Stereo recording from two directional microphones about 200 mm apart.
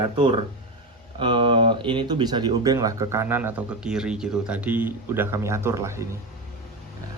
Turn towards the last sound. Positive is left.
turn(degrees=-15)  # may be behind; listen again after turning